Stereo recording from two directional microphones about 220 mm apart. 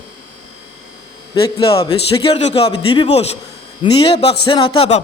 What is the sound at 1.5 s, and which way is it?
A man's voice, 25° left (ahead or behind).